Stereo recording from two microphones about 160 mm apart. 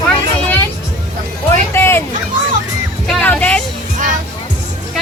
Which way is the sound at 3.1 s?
5° left (ahead or behind).